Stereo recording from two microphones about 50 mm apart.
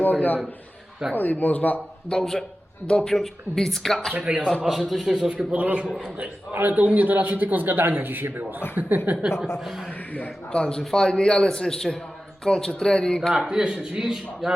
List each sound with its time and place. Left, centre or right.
0.0 s speech: left
2.0 s a man's voice: centre
4.2 s a man's voice: centre
4.7 s speech: centre
5.5 s a man's voice: right
6.5 s a man's voice: right
9.6 s speech: centre
10.5 s a man's voice: centre
13.3 s speech: centre